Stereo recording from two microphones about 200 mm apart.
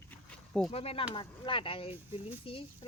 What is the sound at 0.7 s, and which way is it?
Speech, 30° left (ahead or behind).